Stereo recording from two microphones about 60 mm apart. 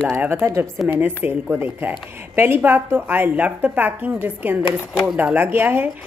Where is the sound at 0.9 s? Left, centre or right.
Right.